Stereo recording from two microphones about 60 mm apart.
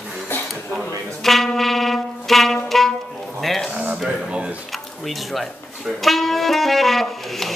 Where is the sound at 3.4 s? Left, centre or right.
Centre.